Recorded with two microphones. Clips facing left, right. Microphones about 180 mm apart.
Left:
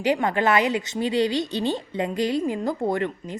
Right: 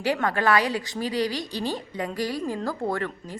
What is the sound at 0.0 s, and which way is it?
A woman's voice, 20° left (ahead or behind).